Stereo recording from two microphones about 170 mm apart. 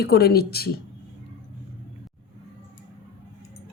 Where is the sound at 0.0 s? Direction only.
65° left (ahead or behind).